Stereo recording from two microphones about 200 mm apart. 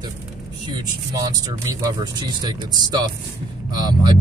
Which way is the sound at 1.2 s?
15° right (ahead or behind).